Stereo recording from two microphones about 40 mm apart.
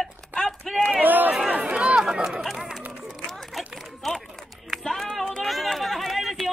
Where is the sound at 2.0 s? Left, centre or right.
Centre.